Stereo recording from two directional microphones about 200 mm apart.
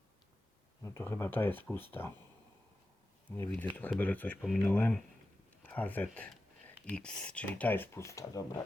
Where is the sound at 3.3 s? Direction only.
10° left (ahead or behind).